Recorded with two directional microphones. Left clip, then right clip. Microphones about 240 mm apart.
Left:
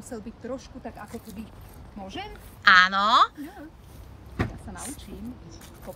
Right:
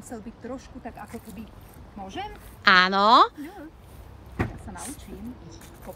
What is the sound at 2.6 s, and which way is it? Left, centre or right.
Speech, right.